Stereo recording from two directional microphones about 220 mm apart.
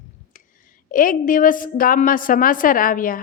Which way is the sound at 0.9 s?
40° left (ahead or behind).